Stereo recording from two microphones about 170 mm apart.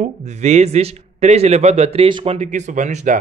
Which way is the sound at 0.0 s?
40° right (ahead or behind).